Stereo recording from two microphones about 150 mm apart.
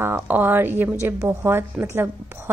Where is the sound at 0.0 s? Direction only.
15° right (ahead or behind).